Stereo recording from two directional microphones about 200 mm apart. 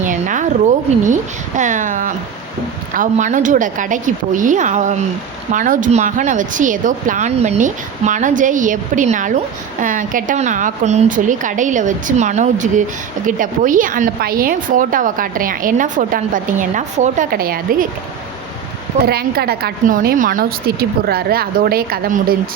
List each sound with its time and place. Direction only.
0.0 s a sound: 40° right (ahead or behind)
1.0 s a woman's voice: 40° right (ahead or behind)
19.0 s a woman's voice: 50° right (ahead or behind)